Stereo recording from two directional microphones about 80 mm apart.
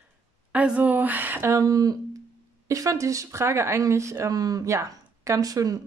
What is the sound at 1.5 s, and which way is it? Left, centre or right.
Speech, right.